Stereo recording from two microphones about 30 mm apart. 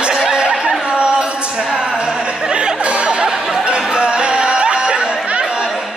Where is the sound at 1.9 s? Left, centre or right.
Right.